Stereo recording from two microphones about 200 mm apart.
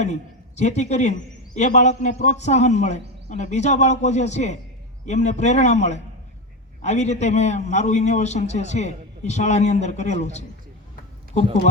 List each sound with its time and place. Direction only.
0.0 s a man's voice: 35° left (ahead or behind)